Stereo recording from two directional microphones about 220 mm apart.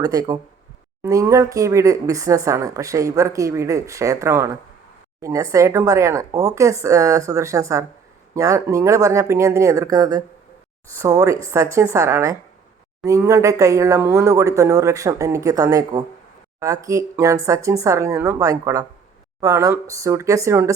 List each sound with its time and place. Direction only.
0.0 s speech: 15° right (ahead or behind)